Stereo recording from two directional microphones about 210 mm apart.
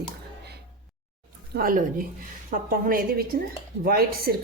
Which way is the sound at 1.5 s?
45° right (ahead or behind).